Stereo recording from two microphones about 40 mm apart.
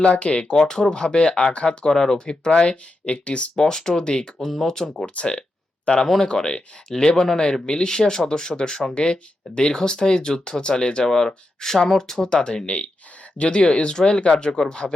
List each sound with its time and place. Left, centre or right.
0.0 s speech: left
0.5 s speech: centre; by 3.5 s left
3.5 s speech: centre; by 6.0 s left
6.2 s speech: left
11.0 s speech: centre
12.6 s speech: left